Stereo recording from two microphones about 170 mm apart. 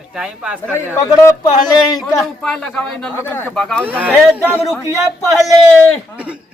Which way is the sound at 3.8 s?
10° right (ahead or behind).